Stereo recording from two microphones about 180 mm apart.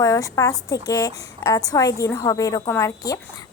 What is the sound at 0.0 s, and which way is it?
A woman's voice, 20° left (ahead or behind).